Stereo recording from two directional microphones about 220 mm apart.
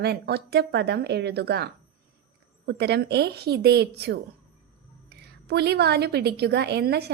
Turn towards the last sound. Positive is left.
turn(degrees=-45)  # may be behind; listen again after turning